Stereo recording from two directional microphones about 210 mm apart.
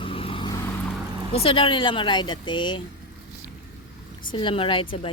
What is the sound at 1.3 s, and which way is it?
Speech, 25° left (ahead or behind).